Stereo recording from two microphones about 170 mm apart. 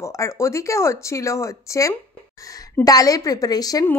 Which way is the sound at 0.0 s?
15° left (ahead or behind).